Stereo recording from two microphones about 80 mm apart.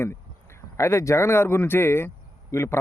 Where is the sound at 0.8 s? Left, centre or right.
Left.